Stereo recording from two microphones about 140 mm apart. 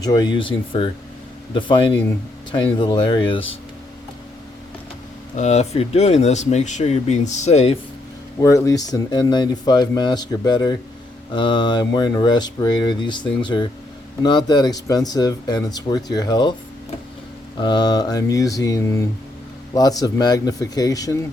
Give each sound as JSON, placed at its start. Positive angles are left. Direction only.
{"t": 0.0, "sound": "speech", "side_deg": 30}
{"t": 5.4, "sound": "speech", "side_deg": 55}
{"t": 8.4, "sound": "speech", "side_deg": 25}
{"t": 17.6, "sound": "speech", "side_deg": 30}